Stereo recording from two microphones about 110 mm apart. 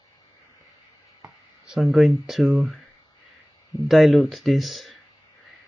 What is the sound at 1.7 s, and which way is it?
Speech, centre (ahead or behind).